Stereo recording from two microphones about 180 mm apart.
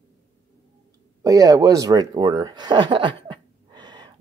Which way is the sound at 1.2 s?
20° right (ahead or behind).